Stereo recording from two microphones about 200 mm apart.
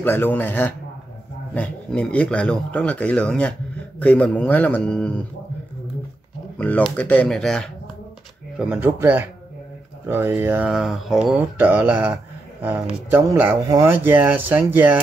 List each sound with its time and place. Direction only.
0.0 s a man's voice: 10° left (ahead or behind)
6.6 s speech: 5° left (ahead or behind)
8.5 s speech: 10° right (ahead or behind)